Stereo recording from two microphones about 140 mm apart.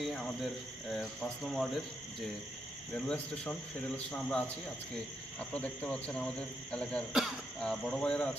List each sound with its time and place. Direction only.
0.0 s speech: 5° left (ahead or behind)
2.9 s speech: 5° left (ahead or behind)
5.5 s speech: 10° left (ahead or behind)